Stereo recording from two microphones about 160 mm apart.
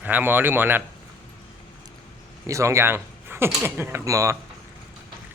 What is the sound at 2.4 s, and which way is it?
Speech, 20° right (ahead or behind).